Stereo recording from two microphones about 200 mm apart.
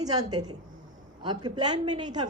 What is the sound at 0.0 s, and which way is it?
Speech, 20° right (ahead or behind).